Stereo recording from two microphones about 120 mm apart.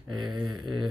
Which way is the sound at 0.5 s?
40° right (ahead or behind).